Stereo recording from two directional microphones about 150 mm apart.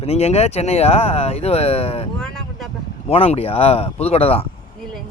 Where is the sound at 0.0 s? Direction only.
45° left (ahead or behind).